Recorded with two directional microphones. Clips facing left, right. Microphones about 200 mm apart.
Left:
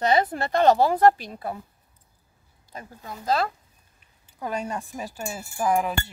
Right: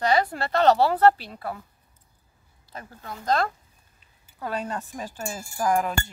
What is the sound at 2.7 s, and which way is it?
Speech, 15° left (ahead or behind).